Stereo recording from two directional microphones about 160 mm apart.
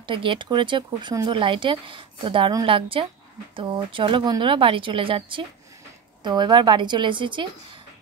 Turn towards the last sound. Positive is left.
turn(degrees=-30)  # may be behind; listen again after turning